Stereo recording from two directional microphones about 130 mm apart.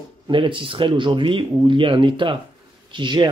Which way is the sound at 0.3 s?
40° right (ahead or behind).